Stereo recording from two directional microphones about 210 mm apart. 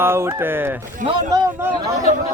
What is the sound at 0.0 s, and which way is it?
Speech, 10° right (ahead or behind).